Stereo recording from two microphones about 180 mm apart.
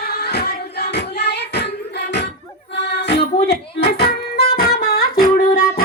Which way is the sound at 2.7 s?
75° left (ahead or behind).